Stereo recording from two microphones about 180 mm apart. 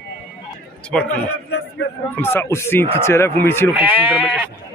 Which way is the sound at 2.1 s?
15° left (ahead or behind).